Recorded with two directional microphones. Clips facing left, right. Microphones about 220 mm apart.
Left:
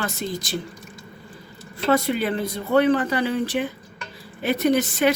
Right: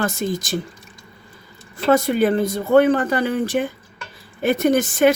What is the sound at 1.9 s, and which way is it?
Speech, 50° right (ahead or behind).